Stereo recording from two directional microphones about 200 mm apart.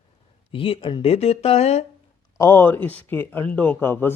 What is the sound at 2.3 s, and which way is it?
Speech, 10° left (ahead or behind).